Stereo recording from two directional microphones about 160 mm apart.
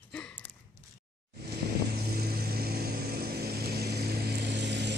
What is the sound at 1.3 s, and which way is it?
Vehicle, 80° right.